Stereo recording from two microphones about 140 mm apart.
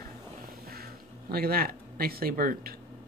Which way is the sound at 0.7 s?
90° right.